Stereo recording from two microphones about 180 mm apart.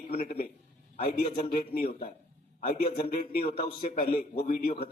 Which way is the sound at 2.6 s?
55° left (ahead or behind).